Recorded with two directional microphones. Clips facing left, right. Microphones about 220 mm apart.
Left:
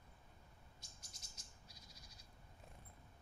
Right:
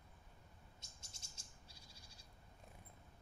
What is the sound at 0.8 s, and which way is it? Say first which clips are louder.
Bird: even; 25° right (ahead or behind).